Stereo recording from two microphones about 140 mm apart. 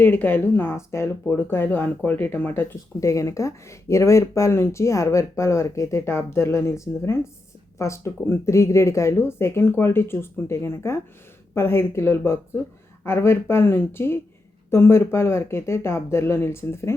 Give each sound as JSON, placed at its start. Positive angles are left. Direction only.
{"t": 0.0, "sound": "speech", "side_deg": 15}